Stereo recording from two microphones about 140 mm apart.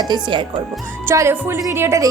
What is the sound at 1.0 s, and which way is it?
Music, 20° right (ahead or behind).